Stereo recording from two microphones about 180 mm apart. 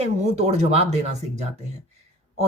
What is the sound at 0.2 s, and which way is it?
A woman's voice, 40° right (ahead or behind).